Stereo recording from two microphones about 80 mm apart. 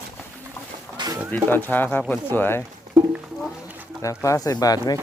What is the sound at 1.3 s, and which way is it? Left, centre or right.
Speech, left.